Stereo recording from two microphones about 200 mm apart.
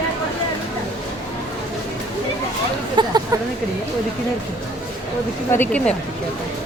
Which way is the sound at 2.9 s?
20° right (ahead or behind).